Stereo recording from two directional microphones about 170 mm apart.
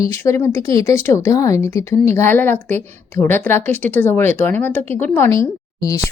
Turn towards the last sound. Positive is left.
turn(degrees=20)  # may be behind; listen again after turning